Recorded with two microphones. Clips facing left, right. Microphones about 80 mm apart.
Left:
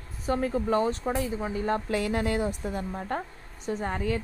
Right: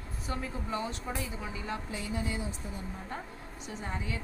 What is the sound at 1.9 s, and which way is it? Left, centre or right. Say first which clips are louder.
A woman's voice: left 9 dB; left.